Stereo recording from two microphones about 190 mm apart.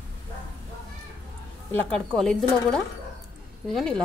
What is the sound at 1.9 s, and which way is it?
A woman's voice, 5° left (ahead or behind).